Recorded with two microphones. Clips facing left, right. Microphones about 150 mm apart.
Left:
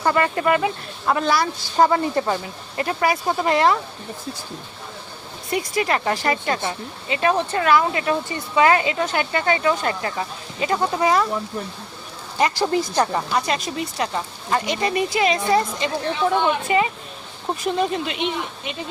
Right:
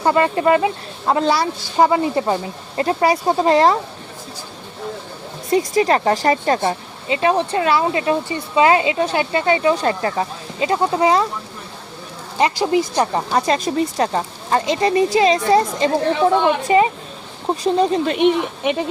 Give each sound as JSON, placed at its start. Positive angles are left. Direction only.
{"t": 0.0, "sound": "speech", "side_deg": -25}
{"t": 1.8, "sound": "speech", "side_deg": -15}
{"t": 5.5, "sound": "speech", "side_deg": -35}
{"t": 7.1, "sound": "speech", "side_deg": -25}
{"t": 12.4, "sound": "speech", "side_deg": -20}
{"t": 13.5, "sound": "speech", "side_deg": -35}
{"t": 14.6, "sound": "speech", "side_deg": -30}
{"t": 18.0, "sound": "speech", "side_deg": -45}